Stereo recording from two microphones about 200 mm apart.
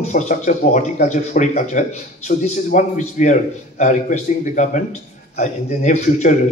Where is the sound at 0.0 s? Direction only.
35° left (ahead or behind).